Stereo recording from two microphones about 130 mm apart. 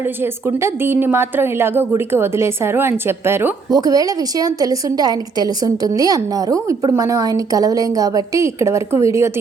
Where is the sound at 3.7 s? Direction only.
30° right (ahead or behind).